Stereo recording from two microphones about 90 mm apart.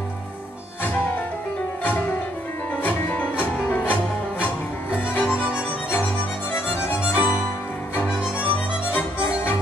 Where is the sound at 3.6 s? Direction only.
20° left (ahead or behind).